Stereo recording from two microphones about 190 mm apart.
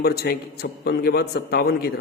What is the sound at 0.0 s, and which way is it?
A man's voice, 55° left (ahead or behind).